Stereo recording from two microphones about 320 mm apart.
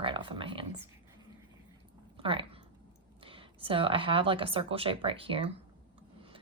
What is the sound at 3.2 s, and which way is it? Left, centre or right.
Speech, centre.